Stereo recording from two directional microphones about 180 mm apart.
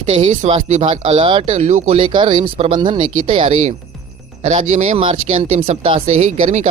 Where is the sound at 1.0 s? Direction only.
30° right (ahead or behind).